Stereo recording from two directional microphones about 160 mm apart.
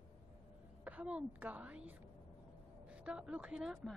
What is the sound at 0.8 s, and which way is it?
A woman's voice, 10° right (ahead or behind).